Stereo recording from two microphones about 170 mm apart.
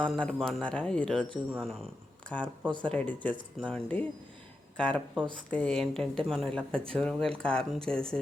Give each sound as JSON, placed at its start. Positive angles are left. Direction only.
{"t": 0.0, "sound": "speech", "side_deg": 5}
{"t": 2.4, "sound": "speech", "side_deg": -30}
{"t": 2.8, "sound": "speech", "side_deg": 5}